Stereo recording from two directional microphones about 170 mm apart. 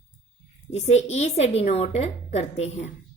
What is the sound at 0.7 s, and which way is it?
A woman's voice, 40° left (ahead or behind).